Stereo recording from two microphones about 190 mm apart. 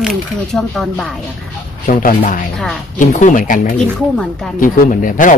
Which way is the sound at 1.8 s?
45° left (ahead or behind).